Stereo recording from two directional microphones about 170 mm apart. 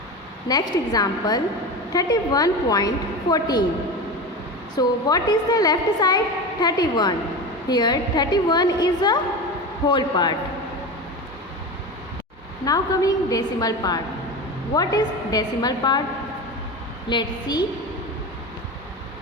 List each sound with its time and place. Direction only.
0.4 s a woman's voice: 20° left (ahead or behind)
4.7 s a woman's voice: 20° left (ahead or behind)
12.6 s a woman's voice: 20° left (ahead or behind)
17.1 s a woman's voice: 25° left (ahead or behind)